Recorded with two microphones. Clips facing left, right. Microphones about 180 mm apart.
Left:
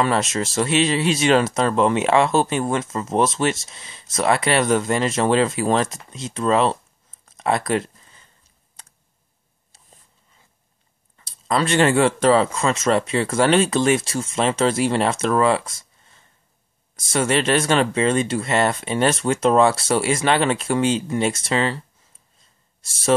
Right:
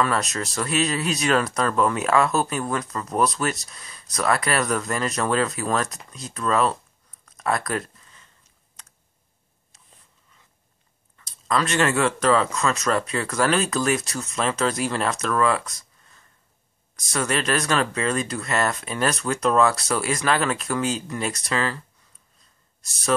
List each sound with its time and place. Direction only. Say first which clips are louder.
0.0 s speech: left 3 dB; 25° left (ahead or behind)
7.2 s a sound: left 4 dB; 25° left (ahead or behind)
8.8 s computer keyboard: left 2 dB; 30° left (ahead or behind)
11.1 s speech: left 2 dB; 30° left (ahead or behind)